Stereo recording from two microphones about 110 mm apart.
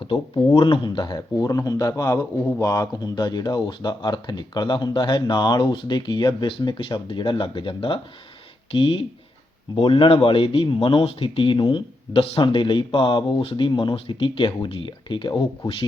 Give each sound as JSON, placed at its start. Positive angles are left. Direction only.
{"t": 0.5, "sound": "speech", "side_deg": 45}